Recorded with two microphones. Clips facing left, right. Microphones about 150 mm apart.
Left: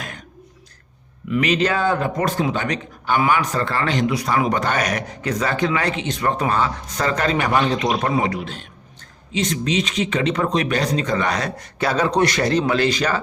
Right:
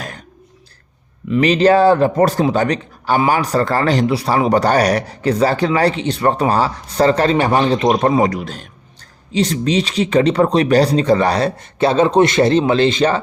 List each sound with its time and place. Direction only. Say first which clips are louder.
1.3 s a man's voice: right 7 dB; 30° right (ahead or behind)
7.9 s a man's voice: right 6 dB; 45° right (ahead or behind); by 13.2 s 25° right (ahead or behind)